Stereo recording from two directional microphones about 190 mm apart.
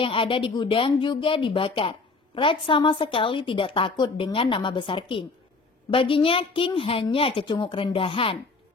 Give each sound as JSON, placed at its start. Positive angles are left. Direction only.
{"t": 0.0, "sound": "speech", "side_deg": 30}